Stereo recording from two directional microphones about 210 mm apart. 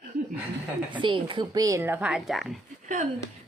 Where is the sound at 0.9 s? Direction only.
20° right (ahead or behind); by 2.6 s centre (ahead or behind).